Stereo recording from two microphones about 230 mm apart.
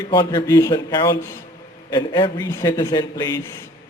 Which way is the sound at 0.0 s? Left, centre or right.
Centre.